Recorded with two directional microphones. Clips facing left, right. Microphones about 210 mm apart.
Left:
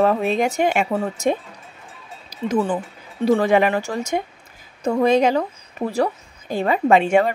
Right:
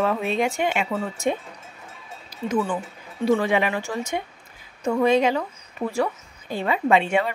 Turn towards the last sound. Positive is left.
turn(degrees=45)  # may be behind; listen again after turning